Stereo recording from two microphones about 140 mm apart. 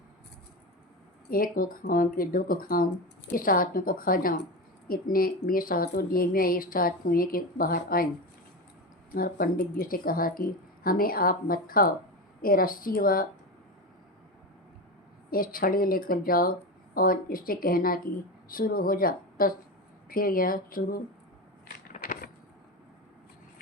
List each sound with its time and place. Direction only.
1.3 s speech: 90° left
9.1 s speech: 90° left
15.3 s speech: 90° left
21.9 s a sound: 80° left